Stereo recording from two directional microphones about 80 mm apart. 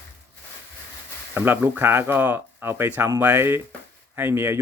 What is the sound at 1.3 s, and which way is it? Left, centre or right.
Speech, right.